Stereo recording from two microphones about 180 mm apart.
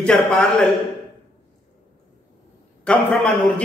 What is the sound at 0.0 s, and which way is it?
Speech, 5° left (ahead or behind).